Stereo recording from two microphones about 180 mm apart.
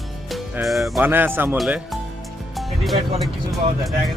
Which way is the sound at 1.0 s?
10° right (ahead or behind).